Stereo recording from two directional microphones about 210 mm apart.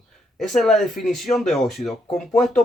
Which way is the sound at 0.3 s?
Centre (ahead or behind).